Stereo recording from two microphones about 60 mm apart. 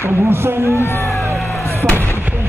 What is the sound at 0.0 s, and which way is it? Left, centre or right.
Speech, right.